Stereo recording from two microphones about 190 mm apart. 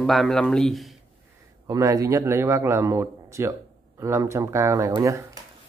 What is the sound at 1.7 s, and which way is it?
A man's voice, 15° right (ahead or behind).